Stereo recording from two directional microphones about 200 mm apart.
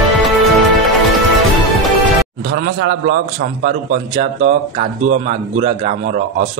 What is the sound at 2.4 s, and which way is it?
A man's voice, 50° right (ahead or behind).